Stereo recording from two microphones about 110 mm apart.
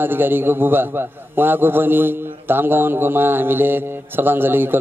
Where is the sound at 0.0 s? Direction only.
20° right (ahead or behind).